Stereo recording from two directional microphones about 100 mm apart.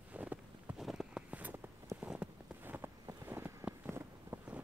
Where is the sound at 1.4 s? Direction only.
20° right (ahead or behind).